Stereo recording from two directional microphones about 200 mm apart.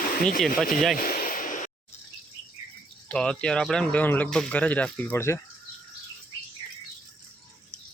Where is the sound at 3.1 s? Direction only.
5° left (ahead or behind).